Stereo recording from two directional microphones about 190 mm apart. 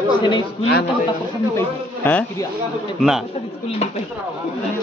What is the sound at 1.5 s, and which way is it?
Speech, 10° left (ahead or behind).